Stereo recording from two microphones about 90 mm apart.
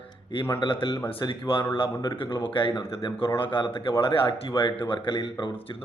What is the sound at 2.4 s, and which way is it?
A man's voice, 70° left (ahead or behind).